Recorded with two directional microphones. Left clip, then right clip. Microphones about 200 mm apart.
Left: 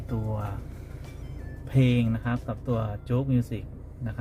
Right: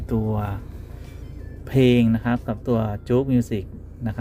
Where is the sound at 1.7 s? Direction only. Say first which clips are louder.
Right 9 dB; 40° right (ahead or behind).